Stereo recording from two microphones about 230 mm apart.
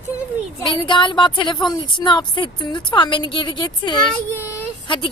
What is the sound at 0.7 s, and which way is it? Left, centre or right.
A woman's voice, left.